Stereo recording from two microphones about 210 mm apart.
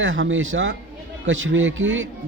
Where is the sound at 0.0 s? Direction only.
60° right (ahead or behind).